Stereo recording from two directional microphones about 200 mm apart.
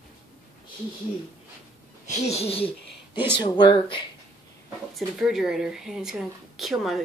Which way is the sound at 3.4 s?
25° left (ahead or behind).